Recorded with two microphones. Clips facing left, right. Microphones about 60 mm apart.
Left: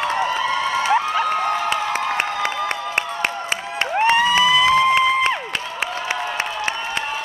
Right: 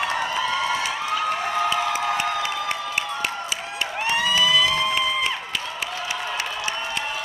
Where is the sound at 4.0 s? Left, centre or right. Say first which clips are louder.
Left 7 dB; left.